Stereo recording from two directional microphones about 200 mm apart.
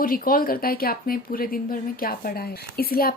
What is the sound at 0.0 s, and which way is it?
Speech, 45° left (ahead or behind).